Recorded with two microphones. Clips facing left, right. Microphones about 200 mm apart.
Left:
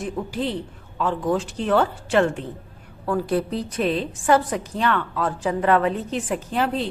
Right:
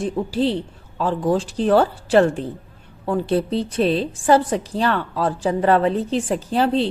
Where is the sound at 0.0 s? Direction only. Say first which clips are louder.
Right 6 dB; 30° right (ahead or behind).